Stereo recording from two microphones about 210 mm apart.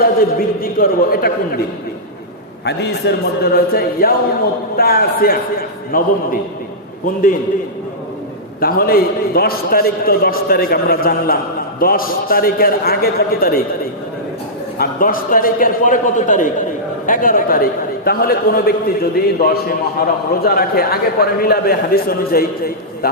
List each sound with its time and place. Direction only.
0.0 s a man's voice: 45° left (ahead or behind)
2.6 s a man's voice: 50° left (ahead or behind)
8.6 s a man's voice: 45° left (ahead or behind)
14.8 s a man's voice: 40° left (ahead or behind)